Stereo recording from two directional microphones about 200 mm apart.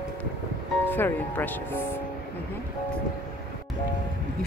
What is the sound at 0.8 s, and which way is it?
Speech, 10° left (ahead or behind).